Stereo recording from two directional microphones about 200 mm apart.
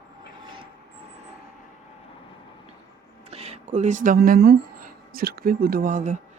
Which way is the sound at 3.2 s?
30° right (ahead or behind).